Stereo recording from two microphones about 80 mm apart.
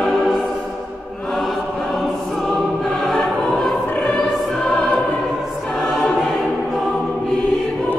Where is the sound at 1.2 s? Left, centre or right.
Centre.